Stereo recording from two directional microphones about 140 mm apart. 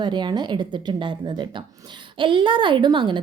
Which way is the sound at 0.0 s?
30° right (ahead or behind).